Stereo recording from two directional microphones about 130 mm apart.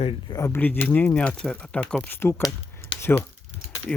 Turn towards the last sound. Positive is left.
turn(degrees=0)  # may be behind; listen again after turning